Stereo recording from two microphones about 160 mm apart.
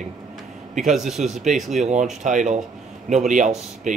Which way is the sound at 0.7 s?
Centre (ahead or behind).